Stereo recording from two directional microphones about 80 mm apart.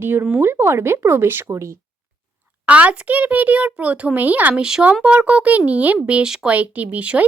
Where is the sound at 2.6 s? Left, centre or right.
Centre.